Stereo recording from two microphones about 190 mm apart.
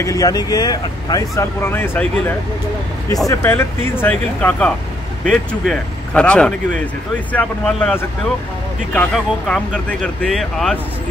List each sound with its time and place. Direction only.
0.0 s speech: 20° left (ahead or behind); by 10.8 s centre (ahead or behind)